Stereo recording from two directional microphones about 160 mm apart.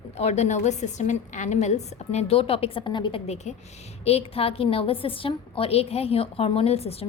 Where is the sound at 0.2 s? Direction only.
45° left (ahead or behind).